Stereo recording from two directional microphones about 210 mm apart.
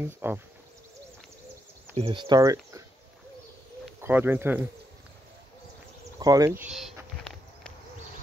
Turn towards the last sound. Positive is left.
turn(degrees=-5)  # may be behind; listen again after turning